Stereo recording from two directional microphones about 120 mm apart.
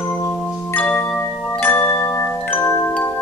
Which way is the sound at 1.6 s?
15° left (ahead or behind).